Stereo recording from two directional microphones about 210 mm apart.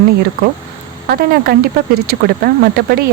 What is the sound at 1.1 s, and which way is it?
Speech, 45° right (ahead or behind).